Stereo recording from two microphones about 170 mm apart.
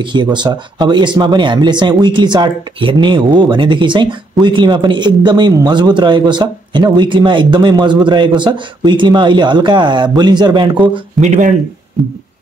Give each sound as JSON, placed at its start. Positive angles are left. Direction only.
{"t": 0.0, "sound": "speech", "side_deg": -25}
{"t": 11.1, "sound": "speech", "side_deg": -45}